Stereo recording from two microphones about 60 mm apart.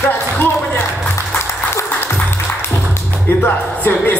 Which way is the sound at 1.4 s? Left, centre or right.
Left.